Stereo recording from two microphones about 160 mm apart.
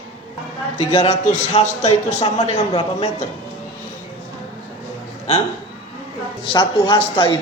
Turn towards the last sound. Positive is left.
turn(degrees=35)  # may be behind; listen again after turning